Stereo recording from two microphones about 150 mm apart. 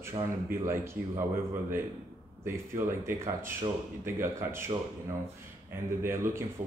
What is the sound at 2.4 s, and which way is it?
Speech, 15° right (ahead or behind).